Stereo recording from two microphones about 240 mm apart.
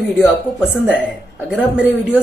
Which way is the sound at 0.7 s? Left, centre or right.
Centre.